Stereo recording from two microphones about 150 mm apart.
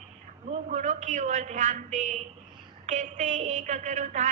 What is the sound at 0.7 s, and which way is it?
A woman's voice, 55° right (ahead or behind).